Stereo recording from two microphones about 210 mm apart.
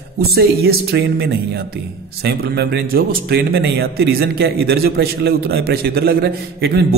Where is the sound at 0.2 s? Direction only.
50° right (ahead or behind).